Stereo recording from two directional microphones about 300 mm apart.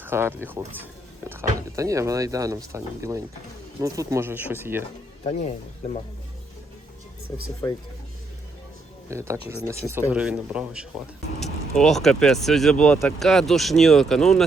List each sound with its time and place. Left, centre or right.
0.0 s speech: centre
9.0 s speech: centre
11.3 s speech: left
11.8 s speech: centre